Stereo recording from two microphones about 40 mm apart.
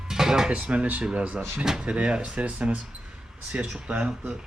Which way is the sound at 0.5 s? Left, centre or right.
Right.